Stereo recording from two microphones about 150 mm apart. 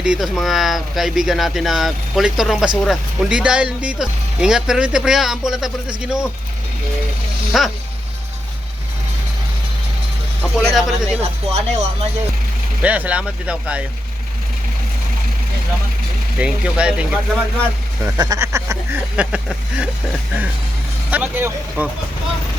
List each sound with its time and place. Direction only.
0.0 s speech: 5° right (ahead or behind)
7.5 s speech: centre (ahead or behind)
10.4 s speech: centre (ahead or behind)
11.2 s speech: 45° right (ahead or behind)
12.8 s speech: 10° right (ahead or behind)
16.4 s speech: 5° right (ahead or behind)
18.0 s speech: 20° right (ahead or behind)
19.1 s speech: 10° right (ahead or behind)
21.1 s speech: 10° right (ahead or behind)